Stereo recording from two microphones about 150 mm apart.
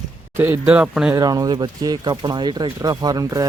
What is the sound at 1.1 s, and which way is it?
Speech, 25° right (ahead or behind).